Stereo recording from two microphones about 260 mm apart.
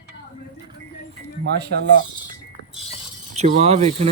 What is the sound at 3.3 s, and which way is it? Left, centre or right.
Speech, right.